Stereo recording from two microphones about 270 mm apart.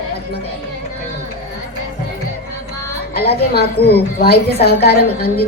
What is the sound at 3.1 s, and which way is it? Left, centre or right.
A woman's voice, left.